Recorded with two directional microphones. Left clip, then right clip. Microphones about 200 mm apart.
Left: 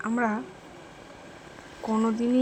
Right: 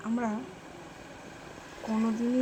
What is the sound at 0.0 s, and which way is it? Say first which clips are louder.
Speech: left 6 dB; 30° left (ahead or behind).